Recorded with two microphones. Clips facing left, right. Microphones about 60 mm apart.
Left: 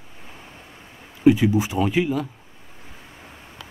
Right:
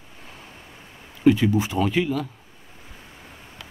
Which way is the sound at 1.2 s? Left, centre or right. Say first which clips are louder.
Left 2 dB; centre.